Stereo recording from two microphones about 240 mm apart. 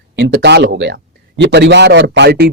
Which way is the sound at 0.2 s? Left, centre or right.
Right.